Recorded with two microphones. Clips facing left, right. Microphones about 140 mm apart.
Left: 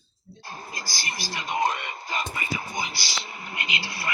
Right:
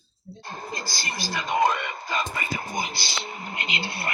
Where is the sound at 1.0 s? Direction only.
50° right (ahead or behind).